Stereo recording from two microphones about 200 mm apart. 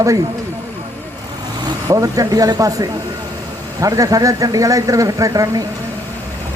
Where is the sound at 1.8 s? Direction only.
15° right (ahead or behind).